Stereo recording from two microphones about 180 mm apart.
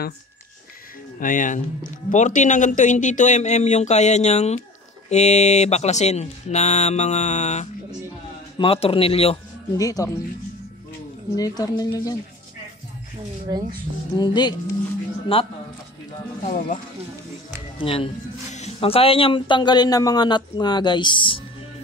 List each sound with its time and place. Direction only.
1.2 s speech: 45° left (ahead or behind)
9.8 s speech: 20° left (ahead or behind)
11.3 s speech: 20° left (ahead or behind)
13.5 s speech: 20° right (ahead or behind)
14.1 s speech: 25° left (ahead or behind)
16.4 s speech: 50° left (ahead or behind)
17.7 s speech: 30° left (ahead or behind)